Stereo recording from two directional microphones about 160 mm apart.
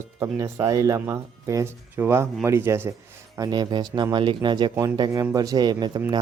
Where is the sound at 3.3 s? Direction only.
25° right (ahead or behind).